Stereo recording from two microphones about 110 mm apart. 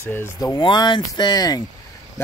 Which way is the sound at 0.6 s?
40° left (ahead or behind).